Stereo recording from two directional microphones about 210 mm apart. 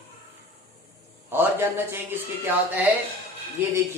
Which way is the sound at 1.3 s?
10° right (ahead or behind).